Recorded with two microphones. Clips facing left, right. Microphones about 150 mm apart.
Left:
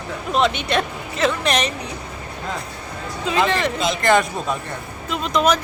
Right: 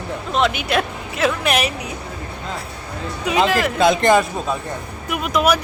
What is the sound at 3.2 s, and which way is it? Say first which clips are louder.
Speech: right 2 dB; 15° right (ahead or behind).